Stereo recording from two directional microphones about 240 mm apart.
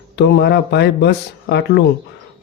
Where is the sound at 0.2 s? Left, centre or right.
Left.